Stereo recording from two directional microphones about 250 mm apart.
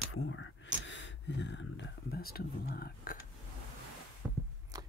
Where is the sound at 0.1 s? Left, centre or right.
Left.